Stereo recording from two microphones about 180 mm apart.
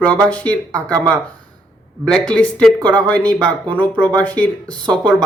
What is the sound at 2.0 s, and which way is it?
Speech, 5° left (ahead or behind).